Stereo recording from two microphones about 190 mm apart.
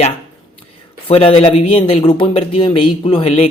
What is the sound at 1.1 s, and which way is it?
Speech, 30° left (ahead or behind).